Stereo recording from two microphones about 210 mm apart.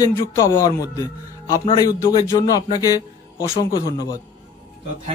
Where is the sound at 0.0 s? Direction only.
15° left (ahead or behind).